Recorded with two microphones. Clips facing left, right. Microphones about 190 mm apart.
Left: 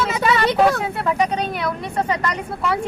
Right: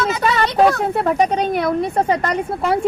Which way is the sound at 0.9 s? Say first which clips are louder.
Right 4 dB; 45° right (ahead or behind).